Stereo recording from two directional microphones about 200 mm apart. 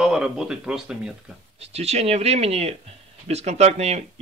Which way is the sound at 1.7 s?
30° right (ahead or behind).